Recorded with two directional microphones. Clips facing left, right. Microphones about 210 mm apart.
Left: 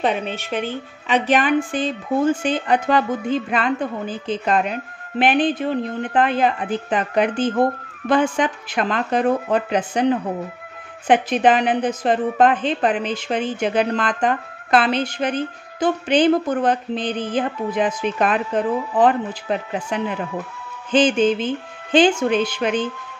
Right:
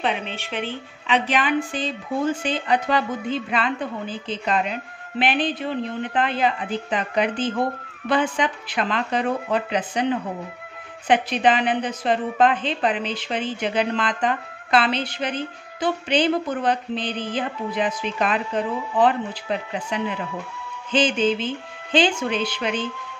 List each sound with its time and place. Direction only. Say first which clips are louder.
0.0 s a woman's voice: left 4 dB; 45° left (ahead or behind)